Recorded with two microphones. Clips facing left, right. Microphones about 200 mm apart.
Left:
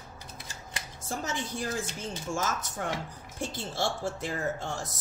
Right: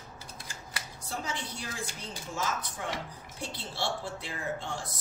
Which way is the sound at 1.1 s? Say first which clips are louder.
Left 4 dB; 45° left (ahead or behind).